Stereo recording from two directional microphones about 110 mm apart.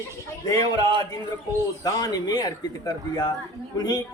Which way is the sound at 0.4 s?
35° left (ahead or behind).